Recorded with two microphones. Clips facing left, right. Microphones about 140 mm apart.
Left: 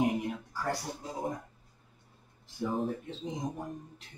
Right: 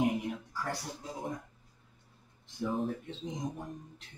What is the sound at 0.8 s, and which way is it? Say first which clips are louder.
Speech: left 3 dB; 25° left (ahead or behind).